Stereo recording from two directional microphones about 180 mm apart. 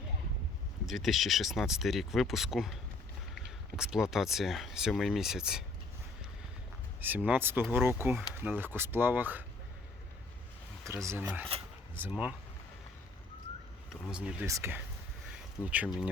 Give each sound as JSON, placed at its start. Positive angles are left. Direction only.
{"t": 0.9, "sound": "speech", "side_deg": 0}
{"t": 3.8, "sound": "speech", "side_deg": -5}
{"t": 7.0, "sound": "speech", "side_deg": -10}
{"t": 10.8, "sound": "speech", "side_deg": -15}
{"t": 13.9, "sound": "speech", "side_deg": -5}
{"t": 14.4, "sound": "speech", "side_deg": -15}
{"t": 15.3, "sound": "a sound", "side_deg": -10}